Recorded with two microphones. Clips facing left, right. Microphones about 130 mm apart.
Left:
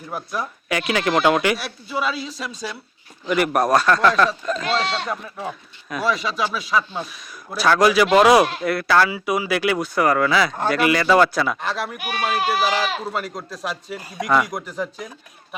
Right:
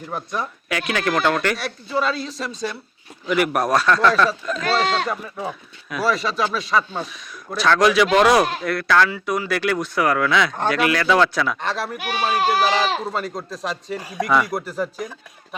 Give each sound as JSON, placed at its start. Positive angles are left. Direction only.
{"t": 0.1, "sound": "speech", "side_deg": 5}
{"t": 12.3, "sound": "speech", "side_deg": -30}
{"t": 12.5, "sound": "speech", "side_deg": 0}